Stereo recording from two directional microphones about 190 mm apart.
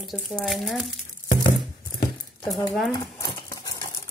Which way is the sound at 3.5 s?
20° left (ahead or behind).